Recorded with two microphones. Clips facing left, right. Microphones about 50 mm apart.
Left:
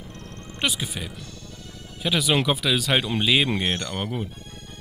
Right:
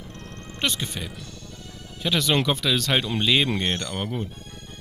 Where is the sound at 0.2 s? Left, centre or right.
Right.